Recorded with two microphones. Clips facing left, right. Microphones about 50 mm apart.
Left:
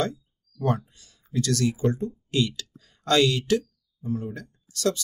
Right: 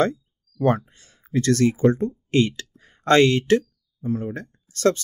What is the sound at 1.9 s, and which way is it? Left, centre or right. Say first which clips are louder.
Speech: right 7 dB; right.